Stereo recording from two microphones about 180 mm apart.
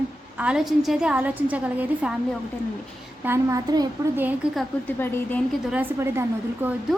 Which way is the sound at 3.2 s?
15° right (ahead or behind).